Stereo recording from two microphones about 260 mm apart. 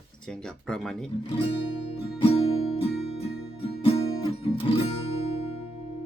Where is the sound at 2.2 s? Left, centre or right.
Left.